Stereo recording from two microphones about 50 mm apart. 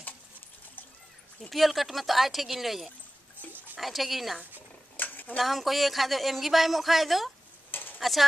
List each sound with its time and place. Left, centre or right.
1.5 s speech: centre
4.9 s dishes: left
5.4 s speech: centre